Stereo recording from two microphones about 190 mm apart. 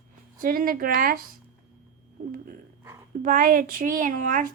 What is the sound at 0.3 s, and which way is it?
Speech, 50° right (ahead or behind).